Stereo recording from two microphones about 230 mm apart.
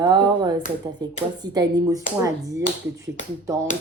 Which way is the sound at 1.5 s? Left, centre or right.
Centre.